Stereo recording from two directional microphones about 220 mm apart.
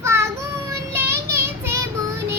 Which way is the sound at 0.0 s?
10° right (ahead or behind).